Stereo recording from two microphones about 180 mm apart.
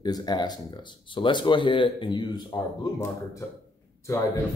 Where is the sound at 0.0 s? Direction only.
25° left (ahead or behind).